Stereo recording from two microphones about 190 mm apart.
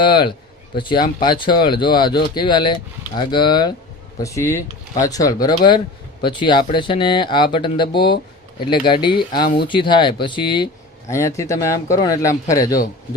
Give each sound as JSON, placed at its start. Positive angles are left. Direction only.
{"t": 0.0, "sound": "speech", "side_deg": 25}